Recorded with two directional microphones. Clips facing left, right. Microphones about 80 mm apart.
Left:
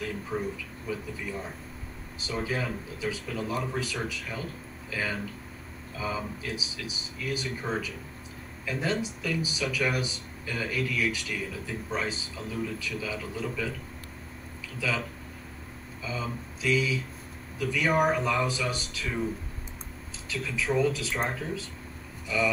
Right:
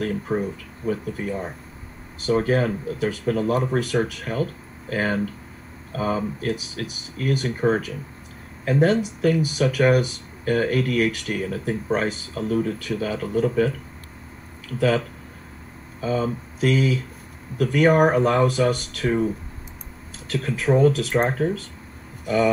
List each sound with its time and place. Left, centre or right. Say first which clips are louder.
0.0 s speech: right 8 dB; right
20.2 s speech: right 8 dB; right